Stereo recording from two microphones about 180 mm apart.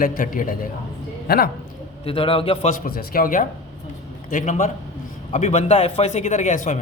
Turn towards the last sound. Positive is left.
turn(degrees=45)  # may be behind; listen again after turning